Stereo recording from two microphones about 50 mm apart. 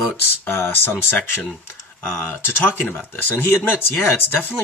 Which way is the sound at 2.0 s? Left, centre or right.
Left.